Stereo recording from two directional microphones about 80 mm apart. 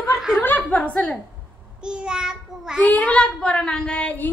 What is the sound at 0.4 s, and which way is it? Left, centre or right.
Speech, left.